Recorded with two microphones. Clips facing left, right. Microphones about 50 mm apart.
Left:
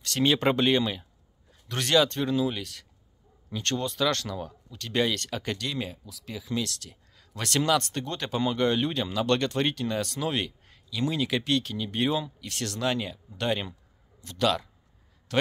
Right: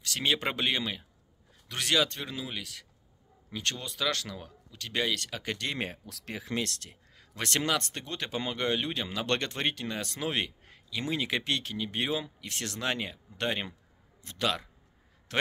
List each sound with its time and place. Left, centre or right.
0.0 s speech: centre
5.6 s speech: right
7.2 s speech: right